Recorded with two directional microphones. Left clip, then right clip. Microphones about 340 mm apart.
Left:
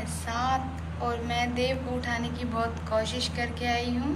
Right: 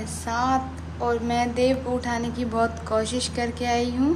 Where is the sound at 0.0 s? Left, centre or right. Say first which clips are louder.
Right 5 dB; centre.